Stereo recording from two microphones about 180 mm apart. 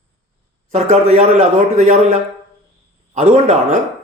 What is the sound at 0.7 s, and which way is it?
A man's voice, 35° right (ahead or behind).